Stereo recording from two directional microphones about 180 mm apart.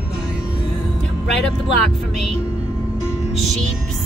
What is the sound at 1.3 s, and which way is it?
Vehicle, centre (ahead or behind).